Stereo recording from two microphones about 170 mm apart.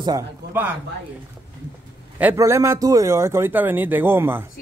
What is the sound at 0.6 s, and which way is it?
Speech, 10° right (ahead or behind).